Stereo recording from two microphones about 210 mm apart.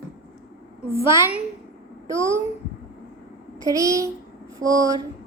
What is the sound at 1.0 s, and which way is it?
A child's voice, 15° right (ahead or behind).